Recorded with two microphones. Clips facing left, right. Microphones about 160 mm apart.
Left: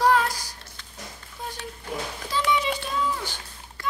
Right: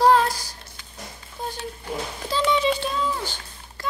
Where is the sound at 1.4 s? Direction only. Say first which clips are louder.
Right 4 dB; 30° right (ahead or behind).